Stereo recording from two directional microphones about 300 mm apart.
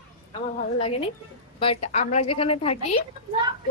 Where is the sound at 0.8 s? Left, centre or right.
Centre.